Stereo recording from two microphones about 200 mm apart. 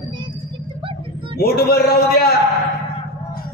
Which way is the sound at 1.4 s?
50° left (ahead or behind).